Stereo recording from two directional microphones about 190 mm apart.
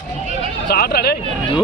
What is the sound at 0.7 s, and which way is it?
Speech, 55° left (ahead or behind).